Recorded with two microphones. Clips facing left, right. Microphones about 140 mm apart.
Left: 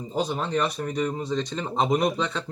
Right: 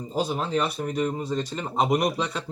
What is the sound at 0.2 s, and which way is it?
Speech, 5° right (ahead or behind).